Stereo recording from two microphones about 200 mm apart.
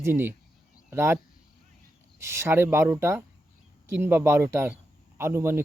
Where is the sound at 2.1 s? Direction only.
15° right (ahead or behind).